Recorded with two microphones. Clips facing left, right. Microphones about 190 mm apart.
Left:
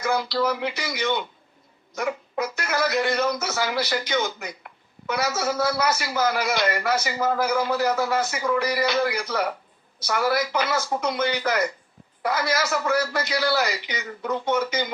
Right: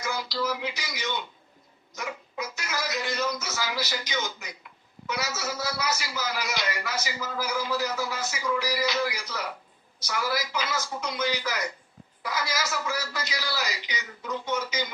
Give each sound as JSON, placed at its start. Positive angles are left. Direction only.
{"t": 0.0, "sound": "a man's voice", "side_deg": 60}